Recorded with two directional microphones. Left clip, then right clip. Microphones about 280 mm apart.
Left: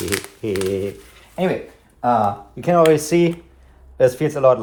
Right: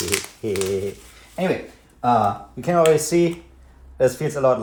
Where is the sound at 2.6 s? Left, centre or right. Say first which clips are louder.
Left 2 dB; left.